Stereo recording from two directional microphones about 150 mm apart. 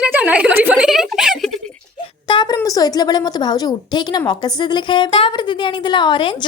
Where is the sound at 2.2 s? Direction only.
30° left (ahead or behind).